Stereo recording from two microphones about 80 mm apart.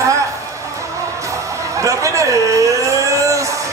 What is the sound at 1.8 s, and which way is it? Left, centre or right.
Speech, right.